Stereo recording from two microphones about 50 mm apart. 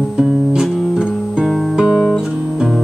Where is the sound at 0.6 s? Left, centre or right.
Centre.